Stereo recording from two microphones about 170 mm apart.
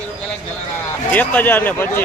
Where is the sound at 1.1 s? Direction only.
10° left (ahead or behind).